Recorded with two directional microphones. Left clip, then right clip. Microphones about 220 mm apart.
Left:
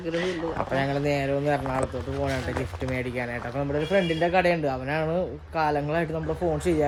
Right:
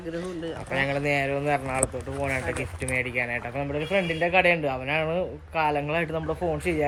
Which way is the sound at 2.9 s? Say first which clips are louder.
Right 5 dB; 5° left (ahead or behind).